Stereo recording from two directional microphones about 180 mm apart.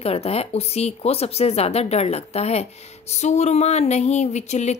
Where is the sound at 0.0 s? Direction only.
35° left (ahead or behind).